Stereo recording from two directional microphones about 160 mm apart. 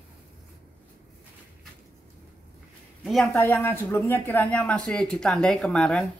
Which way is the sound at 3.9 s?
15° left (ahead or behind).